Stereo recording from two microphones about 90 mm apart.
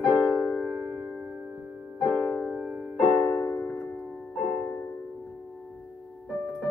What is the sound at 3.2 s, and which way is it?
Music, 35° left (ahead or behind).